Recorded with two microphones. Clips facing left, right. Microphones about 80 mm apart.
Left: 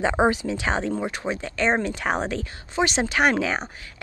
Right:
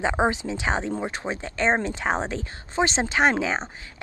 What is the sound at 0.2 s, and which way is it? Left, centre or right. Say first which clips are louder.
A woman's voice: left 2 dB; right.